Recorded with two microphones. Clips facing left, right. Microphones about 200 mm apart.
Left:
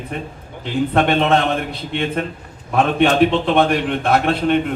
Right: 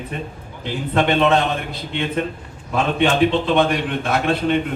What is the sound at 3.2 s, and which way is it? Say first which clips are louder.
Speech: left 2 dB; 55° left (ahead or behind).